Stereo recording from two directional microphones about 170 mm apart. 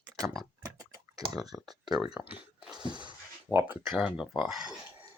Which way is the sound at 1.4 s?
Centre (ahead or behind).